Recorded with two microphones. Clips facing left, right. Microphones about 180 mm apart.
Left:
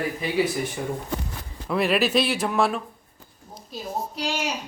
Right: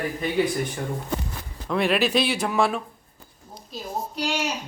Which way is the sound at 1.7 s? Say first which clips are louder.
Even; centre (ahead or behind).